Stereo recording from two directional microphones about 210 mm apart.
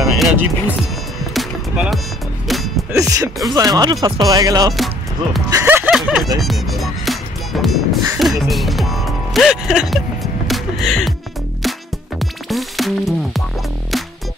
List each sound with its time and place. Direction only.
0.0 s speech: centre (ahead or behind)
1.3 s music: centre (ahead or behind)
2.9 s speech: 15° right (ahead or behind)
4.7 s music: centre (ahead or behind)
5.5 s speech: 10° right (ahead or behind)
6.4 s music: centre (ahead or behind)
8.2 s speech: centre (ahead or behind)
12.2 s music: centre (ahead or behind)